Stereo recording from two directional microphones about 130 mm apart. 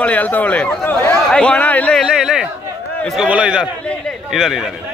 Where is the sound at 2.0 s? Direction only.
5° right (ahead or behind).